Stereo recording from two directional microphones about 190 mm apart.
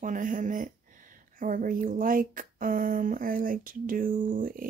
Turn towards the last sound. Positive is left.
turn(degrees=-45)  # may be behind; listen again after turning